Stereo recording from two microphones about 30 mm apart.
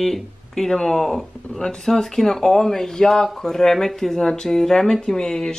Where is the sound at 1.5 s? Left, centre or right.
Centre.